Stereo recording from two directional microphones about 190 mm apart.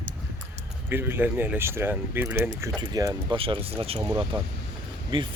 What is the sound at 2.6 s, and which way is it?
Speech, 20° right (ahead or behind).